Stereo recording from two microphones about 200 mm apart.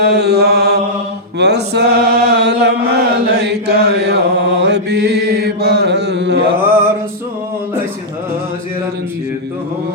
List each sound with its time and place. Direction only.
0.0 s mantra: 55° right (ahead or behind)
1.4 s chant: 55° right (ahead or behind)